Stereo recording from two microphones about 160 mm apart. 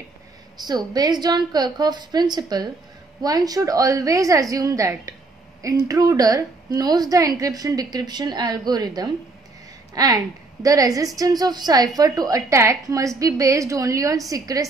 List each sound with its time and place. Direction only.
0.6 s a woman's voice: 25° right (ahead or behind)